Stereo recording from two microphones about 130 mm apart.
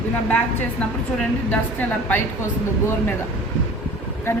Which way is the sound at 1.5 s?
10° left (ahead or behind).